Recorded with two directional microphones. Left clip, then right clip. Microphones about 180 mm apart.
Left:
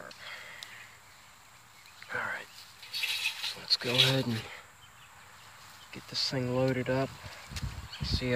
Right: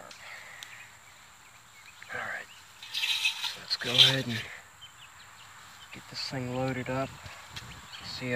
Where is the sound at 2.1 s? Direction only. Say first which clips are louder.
Left 1 dB; 25° left (ahead or behind).